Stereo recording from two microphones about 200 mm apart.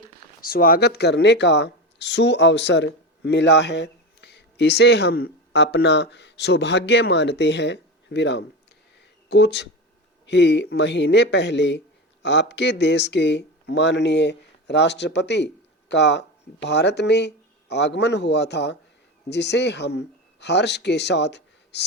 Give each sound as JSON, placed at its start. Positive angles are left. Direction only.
{"t": 0.4, "sound": "speech", "side_deg": 45}